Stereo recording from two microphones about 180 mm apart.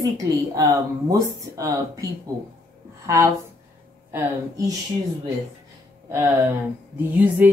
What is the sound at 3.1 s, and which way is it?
Speech, 15° right (ahead or behind).